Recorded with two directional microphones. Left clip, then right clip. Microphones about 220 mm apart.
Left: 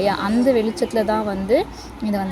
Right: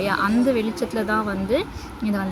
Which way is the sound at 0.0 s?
5° left (ahead or behind).